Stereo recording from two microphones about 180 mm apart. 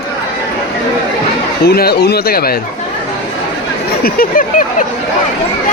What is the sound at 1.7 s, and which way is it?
Speech, 60° left (ahead or behind).